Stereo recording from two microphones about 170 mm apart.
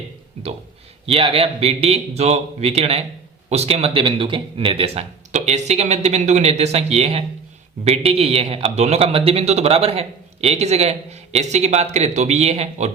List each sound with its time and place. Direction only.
1.0 s a man's voice: 35° right (ahead or behind)